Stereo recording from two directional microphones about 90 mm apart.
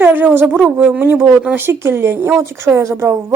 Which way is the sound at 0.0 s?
20° right (ahead or behind).